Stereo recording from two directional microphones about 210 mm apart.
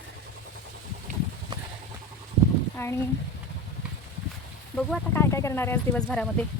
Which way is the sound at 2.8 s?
10° left (ahead or behind).